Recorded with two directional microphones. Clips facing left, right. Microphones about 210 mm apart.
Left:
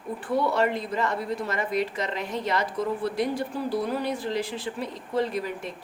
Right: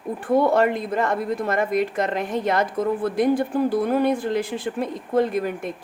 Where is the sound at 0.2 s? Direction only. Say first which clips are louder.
Right 6 dB; 50° right (ahead or behind).